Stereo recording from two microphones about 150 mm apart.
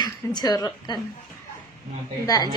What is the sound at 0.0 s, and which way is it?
Speech, 30° left (ahead or behind).